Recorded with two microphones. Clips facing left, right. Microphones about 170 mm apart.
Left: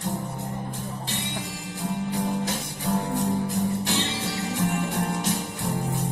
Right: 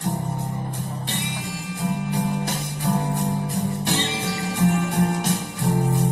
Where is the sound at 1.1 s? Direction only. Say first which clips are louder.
Right 2 dB; 70° right (ahead or behind).